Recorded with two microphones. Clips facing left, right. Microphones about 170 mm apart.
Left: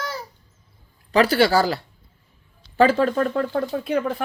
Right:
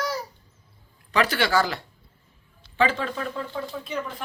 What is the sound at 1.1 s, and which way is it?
Speech, 35° left (ahead or behind).